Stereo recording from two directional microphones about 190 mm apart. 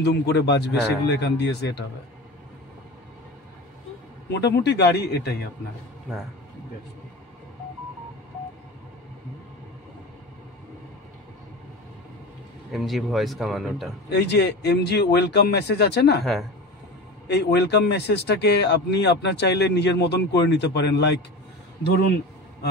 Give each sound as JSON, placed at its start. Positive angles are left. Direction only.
{"t": 0.0, "sound": "speech", "side_deg": 60}
{"t": 4.3, "sound": "speech", "side_deg": 65}
{"t": 12.7, "sound": "speech", "side_deg": 0}
{"t": 14.1, "sound": "speech", "side_deg": 60}
{"t": 17.3, "sound": "speech", "side_deg": 60}
{"t": 21.8, "sound": "speech", "side_deg": 55}